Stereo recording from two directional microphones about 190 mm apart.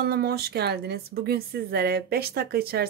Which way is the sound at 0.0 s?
55° right (ahead or behind).